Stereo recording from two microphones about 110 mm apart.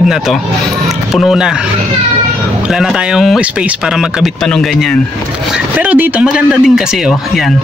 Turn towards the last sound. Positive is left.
turn(degrees=0)  # may be behind; listen again after turning